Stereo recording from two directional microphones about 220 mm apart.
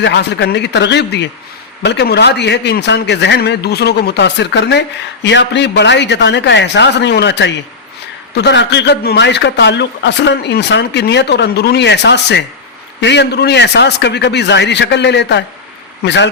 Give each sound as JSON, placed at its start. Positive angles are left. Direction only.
{"t": 0.0, "sound": "a man's voice", "side_deg": 50}